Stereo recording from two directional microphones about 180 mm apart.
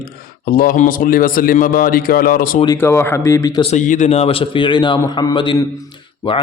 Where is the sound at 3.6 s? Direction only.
45° left (ahead or behind).